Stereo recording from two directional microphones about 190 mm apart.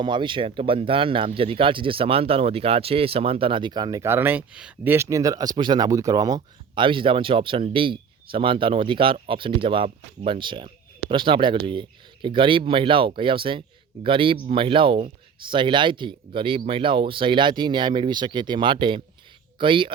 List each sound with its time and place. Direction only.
0.0 s speech: 25° right (ahead or behind)